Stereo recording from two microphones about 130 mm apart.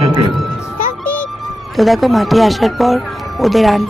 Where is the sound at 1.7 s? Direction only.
Centre (ahead or behind).